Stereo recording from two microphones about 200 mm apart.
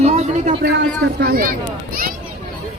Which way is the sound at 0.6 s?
55° right (ahead or behind).